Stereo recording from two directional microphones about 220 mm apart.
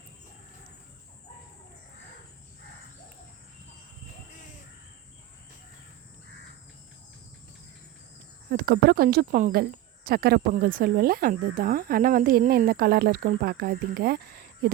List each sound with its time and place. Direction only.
8.4 s speech: 45° right (ahead or behind)